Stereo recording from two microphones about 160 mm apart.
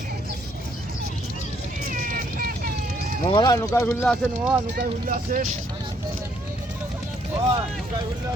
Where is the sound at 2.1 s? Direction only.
60° right (ahead or behind).